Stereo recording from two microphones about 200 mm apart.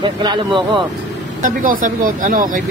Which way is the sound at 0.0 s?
20° right (ahead or behind).